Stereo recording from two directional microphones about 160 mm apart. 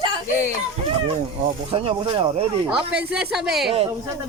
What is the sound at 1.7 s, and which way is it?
Speech, 35° right (ahead or behind).